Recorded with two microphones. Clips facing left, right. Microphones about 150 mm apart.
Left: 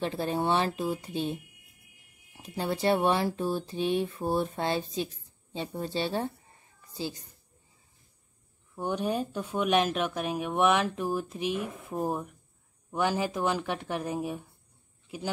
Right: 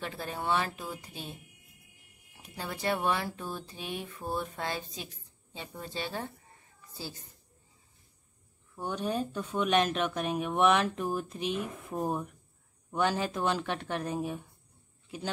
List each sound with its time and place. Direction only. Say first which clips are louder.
0.0 s speech: left 7 dB; 30° left (ahead or behind)
2.4 s speech: left 6 dB; 30° left (ahead or behind)
6.9 s a woman's voice: left 7 dB; 20° left (ahead or behind)
8.7 s speech: left 3 dB; 15° left (ahead or behind)